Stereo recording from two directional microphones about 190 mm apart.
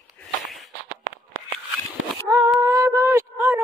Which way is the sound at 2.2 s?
20° right (ahead or behind).